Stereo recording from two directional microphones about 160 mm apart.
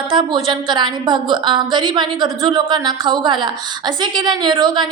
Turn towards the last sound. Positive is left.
turn(degrees=-30)  # may be behind; listen again after turning